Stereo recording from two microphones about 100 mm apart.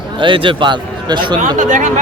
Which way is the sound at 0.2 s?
55° right (ahead or behind).